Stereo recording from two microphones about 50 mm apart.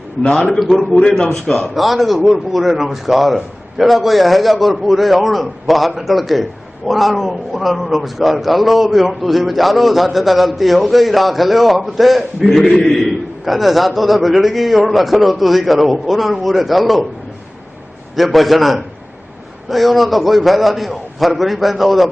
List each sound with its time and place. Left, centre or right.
0.2 s a man's voice: centre
0.6 s a man's voice: centre
1.2 s a man's voice: centre
18.2 s a man's voice: centre